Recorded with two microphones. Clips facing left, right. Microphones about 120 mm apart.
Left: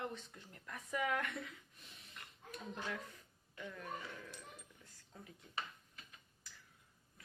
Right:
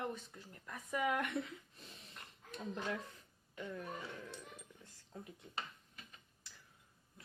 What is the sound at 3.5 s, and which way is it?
Speech, 25° right (ahead or behind).